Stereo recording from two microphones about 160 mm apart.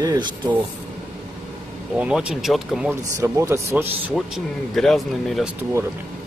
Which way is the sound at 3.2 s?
20° right (ahead or behind).